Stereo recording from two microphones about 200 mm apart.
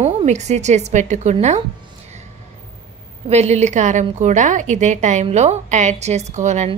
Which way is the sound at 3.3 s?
35° right (ahead or behind).